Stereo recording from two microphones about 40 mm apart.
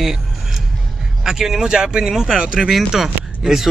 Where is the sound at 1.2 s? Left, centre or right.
Centre.